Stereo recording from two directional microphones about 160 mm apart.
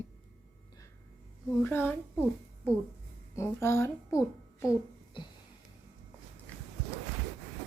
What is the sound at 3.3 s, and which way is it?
Speech, 15° left (ahead or behind).